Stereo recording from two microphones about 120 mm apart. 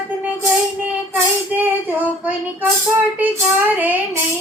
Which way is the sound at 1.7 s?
15° right (ahead or behind).